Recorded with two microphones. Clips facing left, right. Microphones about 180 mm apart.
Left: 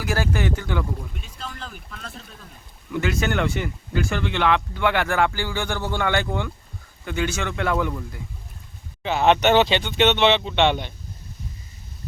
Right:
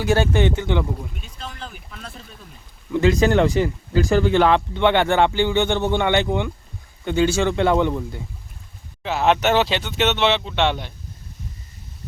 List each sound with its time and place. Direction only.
0.0 s speech: 25° right (ahead or behind)
1.2 s speech: centre (ahead or behind)
2.9 s speech: 30° right (ahead or behind)
9.0 s speech: centre (ahead or behind)